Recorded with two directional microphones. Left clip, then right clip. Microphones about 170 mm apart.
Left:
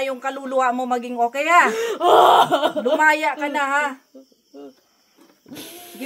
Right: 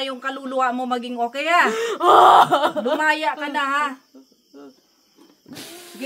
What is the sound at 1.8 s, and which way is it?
Speech, 20° right (ahead or behind).